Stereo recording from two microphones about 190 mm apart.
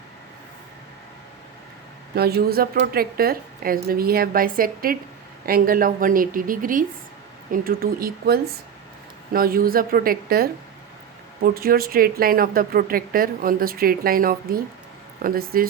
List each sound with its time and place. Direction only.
2.1 s speech: 55° right (ahead or behind)